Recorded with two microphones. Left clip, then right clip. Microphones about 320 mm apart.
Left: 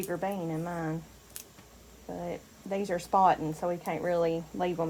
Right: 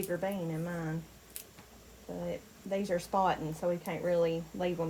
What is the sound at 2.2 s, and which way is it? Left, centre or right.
Speech, left.